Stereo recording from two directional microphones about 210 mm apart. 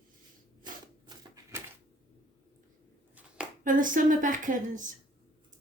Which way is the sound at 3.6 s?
40° right (ahead or behind).